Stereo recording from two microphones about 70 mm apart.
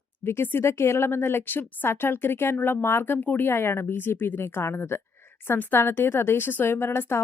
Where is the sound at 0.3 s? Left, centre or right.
Left.